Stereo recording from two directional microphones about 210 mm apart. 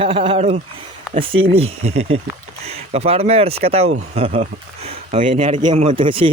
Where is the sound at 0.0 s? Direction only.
25° right (ahead or behind).